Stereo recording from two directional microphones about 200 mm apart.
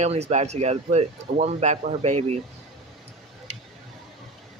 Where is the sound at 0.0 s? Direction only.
35° right (ahead or behind).